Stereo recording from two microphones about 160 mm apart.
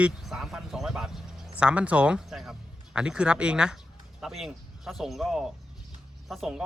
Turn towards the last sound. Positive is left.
turn(degrees=0)  # may be behind; listen again after turning